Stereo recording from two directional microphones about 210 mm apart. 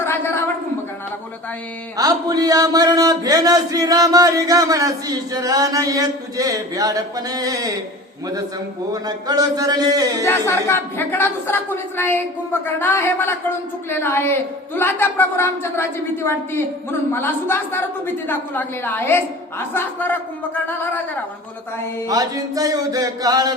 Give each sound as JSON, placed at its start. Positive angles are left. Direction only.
{"t": 0.0, "sound": "a sound", "side_deg": 10}
{"t": 2.0, "sound": "speech", "side_deg": -15}
{"t": 8.9, "sound": "speech", "side_deg": -20}
{"t": 10.2, "sound": "a woman's voice", "side_deg": 10}
{"t": 22.0, "sound": "speech", "side_deg": -15}